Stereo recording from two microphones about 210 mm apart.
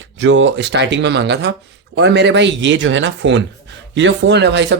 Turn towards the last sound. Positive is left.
turn(degrees=-55)  # may be behind; listen again after turning